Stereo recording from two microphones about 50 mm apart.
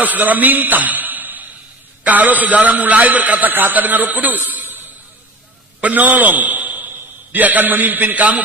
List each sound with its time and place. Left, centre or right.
0.0 s a man's voice: right